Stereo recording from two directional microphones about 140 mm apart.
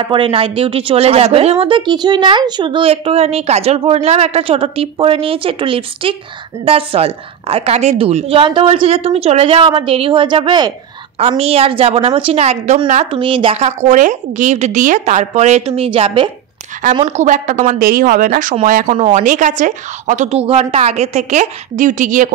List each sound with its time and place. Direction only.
0.0 s a woman's voice: 35° right (ahead or behind)
11.1 s a woman's voice: 45° right (ahead or behind)
13.1 s a woman's voice: 40° right (ahead or behind)
17.0 s a woman's voice: 60° right (ahead or behind)